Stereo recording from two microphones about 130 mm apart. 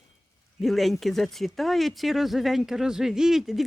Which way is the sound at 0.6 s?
Centre (ahead or behind).